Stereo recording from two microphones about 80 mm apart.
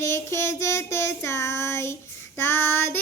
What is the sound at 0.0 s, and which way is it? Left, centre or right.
Child singing, left.